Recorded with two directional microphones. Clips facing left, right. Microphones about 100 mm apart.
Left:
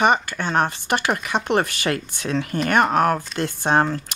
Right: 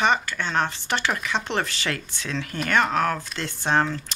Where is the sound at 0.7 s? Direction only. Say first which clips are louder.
Left 4 dB; 55° left (ahead or behind).